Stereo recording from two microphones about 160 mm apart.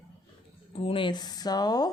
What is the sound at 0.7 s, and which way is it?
Speech, 35° left (ahead or behind).